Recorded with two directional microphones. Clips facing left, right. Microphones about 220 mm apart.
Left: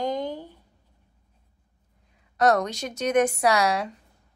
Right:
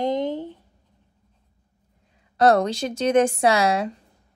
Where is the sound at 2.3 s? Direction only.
30° right (ahead or behind).